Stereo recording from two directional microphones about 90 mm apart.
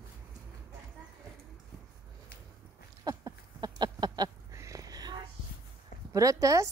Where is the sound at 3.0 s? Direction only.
45° right (ahead or behind).